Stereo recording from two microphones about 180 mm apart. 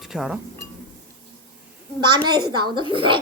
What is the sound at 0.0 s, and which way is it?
Speech, 5° right (ahead or behind).